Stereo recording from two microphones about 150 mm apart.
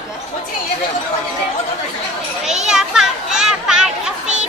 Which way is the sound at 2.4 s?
5° right (ahead or behind).